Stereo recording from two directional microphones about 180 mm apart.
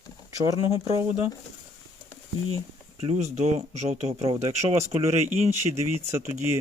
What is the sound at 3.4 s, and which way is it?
Speech, 40° right (ahead or behind).